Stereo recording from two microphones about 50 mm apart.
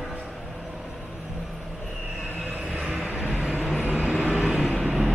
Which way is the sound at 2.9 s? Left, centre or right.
Right.